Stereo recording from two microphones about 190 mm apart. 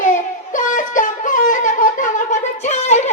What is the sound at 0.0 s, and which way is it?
Wind instrument, 40° left (ahead or behind).